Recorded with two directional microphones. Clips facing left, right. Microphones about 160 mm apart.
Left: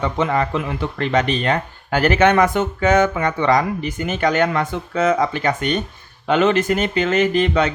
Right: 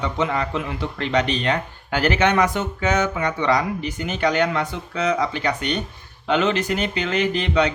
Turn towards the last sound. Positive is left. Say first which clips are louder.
# left 3 dB
turn(degrees=50)  # may be behind; listen again after turning